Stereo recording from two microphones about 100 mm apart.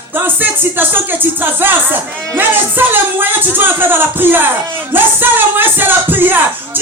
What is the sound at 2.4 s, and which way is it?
Speech, 20° right (ahead or behind).